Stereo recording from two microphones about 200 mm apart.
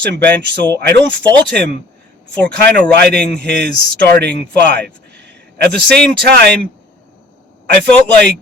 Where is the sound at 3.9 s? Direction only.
55° right (ahead or behind).